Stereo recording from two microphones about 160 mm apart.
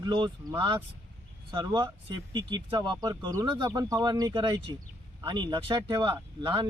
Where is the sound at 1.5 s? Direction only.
25° right (ahead or behind).